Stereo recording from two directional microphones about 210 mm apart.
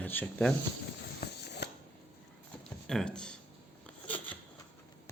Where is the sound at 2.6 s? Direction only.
5° left (ahead or behind).